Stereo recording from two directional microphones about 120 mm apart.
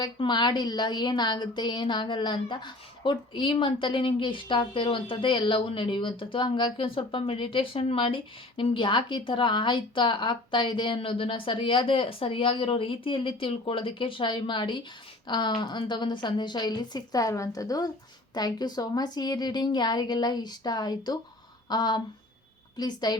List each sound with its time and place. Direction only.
0.0 s a woman's voice: 40° left (ahead or behind)